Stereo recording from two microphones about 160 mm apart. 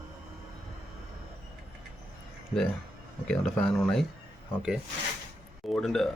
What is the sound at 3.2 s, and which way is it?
Speech, 5° left (ahead or behind).